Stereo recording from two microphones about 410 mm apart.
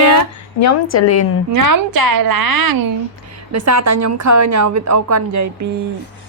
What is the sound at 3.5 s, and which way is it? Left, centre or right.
A woman's voice, right.